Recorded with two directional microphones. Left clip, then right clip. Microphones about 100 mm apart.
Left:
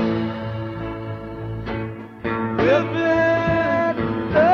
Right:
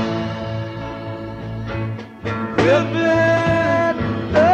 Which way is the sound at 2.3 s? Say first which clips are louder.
Right 2 dB; 35° left (ahead or behind).